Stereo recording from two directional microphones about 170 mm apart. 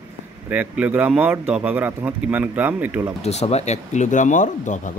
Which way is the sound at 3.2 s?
40° left (ahead or behind).